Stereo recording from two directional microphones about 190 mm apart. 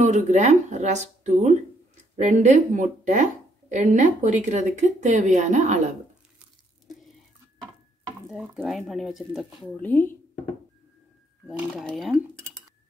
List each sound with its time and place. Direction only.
0.0 s speech: 35° right (ahead or behind)
8.3 s speech: centre (ahead or behind)
9.8 s speech: 10° left (ahead or behind)
11.4 s speech: centre (ahead or behind)